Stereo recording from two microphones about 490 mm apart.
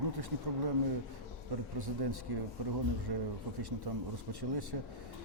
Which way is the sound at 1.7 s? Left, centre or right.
Right.